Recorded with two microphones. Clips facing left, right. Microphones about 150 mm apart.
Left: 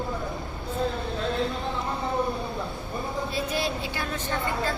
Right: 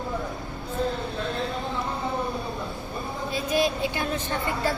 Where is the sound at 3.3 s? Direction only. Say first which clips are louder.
Right 7 dB; 15° right (ahead or behind).